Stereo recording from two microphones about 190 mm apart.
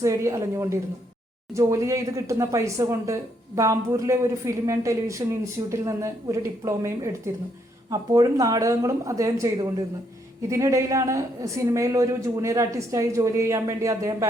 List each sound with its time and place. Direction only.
0.0 s speech: 15° right (ahead or behind)